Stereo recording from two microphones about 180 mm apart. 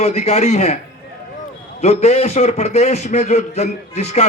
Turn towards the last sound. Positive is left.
turn(degrees=35)  # may be behind; listen again after turning